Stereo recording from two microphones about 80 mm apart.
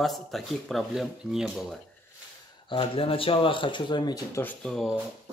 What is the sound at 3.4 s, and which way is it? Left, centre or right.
Speech, left.